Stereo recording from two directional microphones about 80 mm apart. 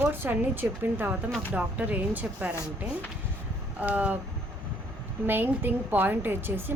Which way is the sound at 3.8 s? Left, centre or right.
Centre.